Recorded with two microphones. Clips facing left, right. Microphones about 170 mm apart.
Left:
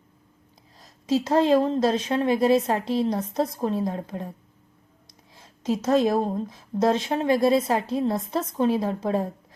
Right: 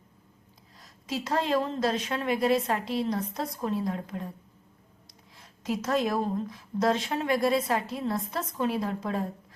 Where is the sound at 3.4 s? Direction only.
35° left (ahead or behind).